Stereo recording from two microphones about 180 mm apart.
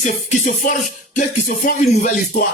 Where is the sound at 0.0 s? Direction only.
45° left (ahead or behind).